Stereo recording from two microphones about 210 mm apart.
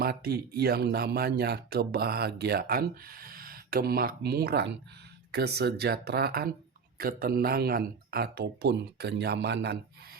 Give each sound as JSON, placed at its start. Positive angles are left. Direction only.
{"t": 0.0, "sound": "speech", "side_deg": -50}